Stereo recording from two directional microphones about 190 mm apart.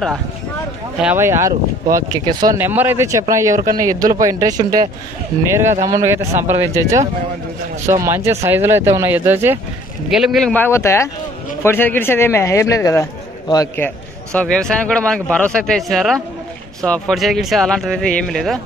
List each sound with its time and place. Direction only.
0.9 s speech: 10° right (ahead or behind)
5.9 s speech: 15° right (ahead or behind)
10.5 s speech: 10° left (ahead or behind)
13.8 s speech: 5° left (ahead or behind)